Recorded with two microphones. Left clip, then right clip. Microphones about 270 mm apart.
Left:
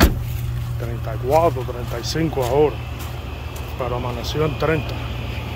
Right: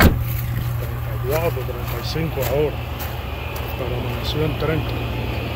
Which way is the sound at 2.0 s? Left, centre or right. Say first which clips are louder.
Left 4 dB; centre.